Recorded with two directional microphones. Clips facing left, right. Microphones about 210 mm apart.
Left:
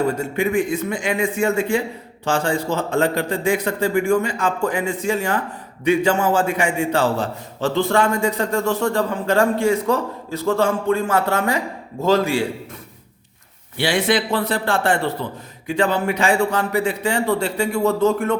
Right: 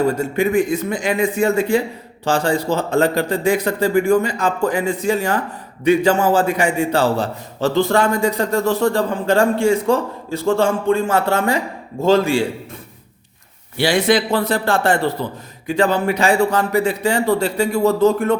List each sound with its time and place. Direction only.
0.1 s a man's voice: 40° right (ahead or behind)
13.7 s a man's voice: 40° right (ahead or behind)